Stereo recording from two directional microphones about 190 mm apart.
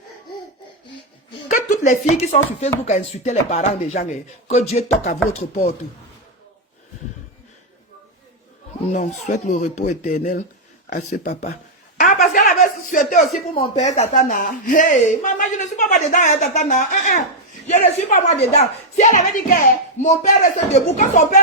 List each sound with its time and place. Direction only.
1.5 s speech: 40° left (ahead or behind)
8.9 s speech: 40° left (ahead or behind)
11.9 s a sound: 40° left (ahead or behind)
13.5 s speech: 35° left (ahead or behind)